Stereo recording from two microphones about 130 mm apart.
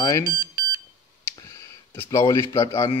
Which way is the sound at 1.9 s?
20° left (ahead or behind).